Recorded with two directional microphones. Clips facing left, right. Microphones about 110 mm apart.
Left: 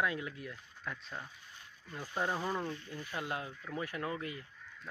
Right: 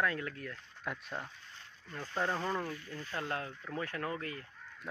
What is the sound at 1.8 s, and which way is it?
Speech, 10° left (ahead or behind).